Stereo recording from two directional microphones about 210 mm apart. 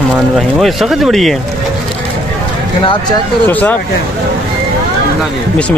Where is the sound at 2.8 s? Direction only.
20° left (ahead or behind).